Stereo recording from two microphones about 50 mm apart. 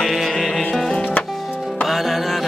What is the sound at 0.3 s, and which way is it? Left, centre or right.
Music, centre.